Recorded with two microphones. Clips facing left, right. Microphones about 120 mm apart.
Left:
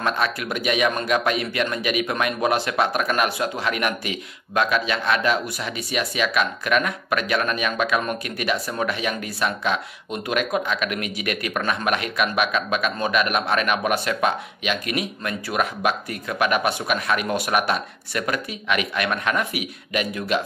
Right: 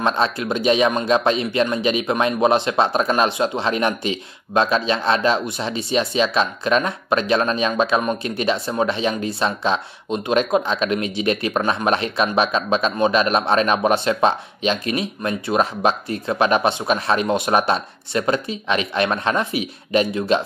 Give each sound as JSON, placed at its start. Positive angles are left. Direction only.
{"t": 0.0, "sound": "speech", "side_deg": -25}